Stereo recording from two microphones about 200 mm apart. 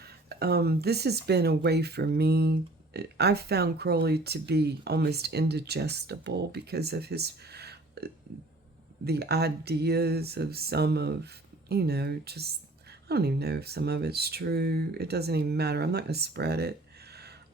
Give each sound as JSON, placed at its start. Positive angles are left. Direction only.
{"t": 0.0, "sound": "speech", "side_deg": -50}